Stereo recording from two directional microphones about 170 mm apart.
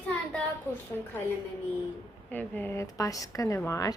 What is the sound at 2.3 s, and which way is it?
Speech, 10° left (ahead or behind).